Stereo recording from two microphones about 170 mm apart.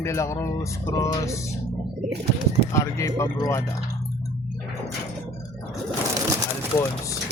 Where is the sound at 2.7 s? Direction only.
20° left (ahead or behind).